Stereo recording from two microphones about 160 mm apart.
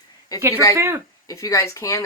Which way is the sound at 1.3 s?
20° left (ahead or behind).